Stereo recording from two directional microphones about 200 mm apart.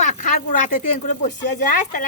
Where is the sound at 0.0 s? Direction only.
40° left (ahead or behind).